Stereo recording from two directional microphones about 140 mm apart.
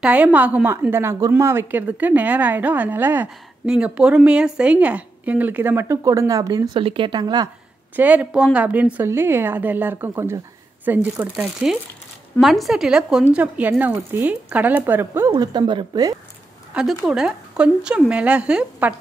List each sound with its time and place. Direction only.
0.0 s a woman's voice: 10° right (ahead or behind); by 6.8 s 25° right (ahead or behind)
6.8 s speech: 40° right (ahead or behind)
7.9 s a woman's voice: 10° right (ahead or behind)
15.3 s a woman's voice: 30° right (ahead or behind)
17.0 s a woman's voice: 5° right (ahead or behind)